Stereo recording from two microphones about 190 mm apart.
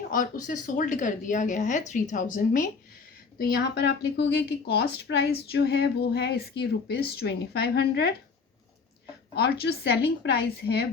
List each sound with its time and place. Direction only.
0.1 s speech: 45° left (ahead or behind)
9.3 s speech: 60° left (ahead or behind)